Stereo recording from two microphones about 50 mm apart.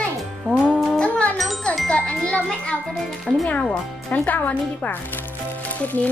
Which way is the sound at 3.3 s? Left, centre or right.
Centre.